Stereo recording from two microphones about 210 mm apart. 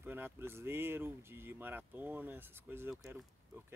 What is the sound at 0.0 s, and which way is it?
Speech, 10° right (ahead or behind).